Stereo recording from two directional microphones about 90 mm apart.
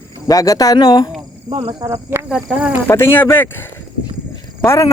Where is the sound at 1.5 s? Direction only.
75° right (ahead or behind).